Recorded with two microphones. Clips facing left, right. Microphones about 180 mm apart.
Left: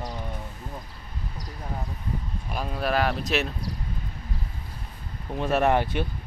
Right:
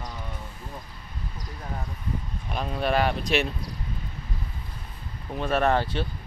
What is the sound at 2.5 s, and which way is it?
Speech, 5° left (ahead or behind).